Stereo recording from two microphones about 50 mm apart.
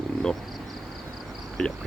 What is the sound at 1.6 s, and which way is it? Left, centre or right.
Speech, centre.